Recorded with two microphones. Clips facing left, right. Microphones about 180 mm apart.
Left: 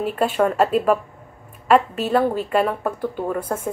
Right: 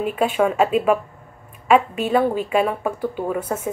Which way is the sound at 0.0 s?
5° right (ahead or behind).